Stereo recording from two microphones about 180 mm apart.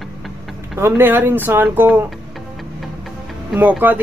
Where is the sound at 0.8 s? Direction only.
15° right (ahead or behind).